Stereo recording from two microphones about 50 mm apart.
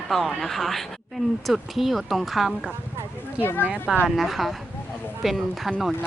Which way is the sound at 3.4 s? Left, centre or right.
Left.